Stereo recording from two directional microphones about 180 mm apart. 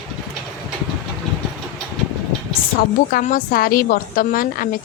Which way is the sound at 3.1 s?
50° left (ahead or behind).